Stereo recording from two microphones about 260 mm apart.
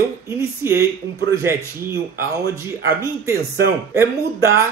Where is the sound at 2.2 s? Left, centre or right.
Centre.